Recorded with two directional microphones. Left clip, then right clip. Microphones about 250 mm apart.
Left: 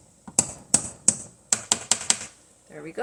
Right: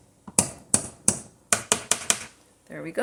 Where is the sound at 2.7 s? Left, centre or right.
Right.